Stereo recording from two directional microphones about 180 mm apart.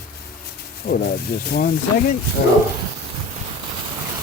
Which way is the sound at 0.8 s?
55° left (ahead or behind).